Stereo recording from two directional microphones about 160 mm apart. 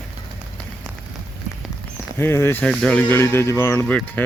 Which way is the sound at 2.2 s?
15° left (ahead or behind).